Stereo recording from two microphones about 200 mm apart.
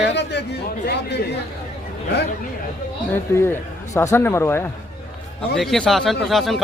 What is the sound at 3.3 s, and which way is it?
A man's voice, 10° left (ahead or behind).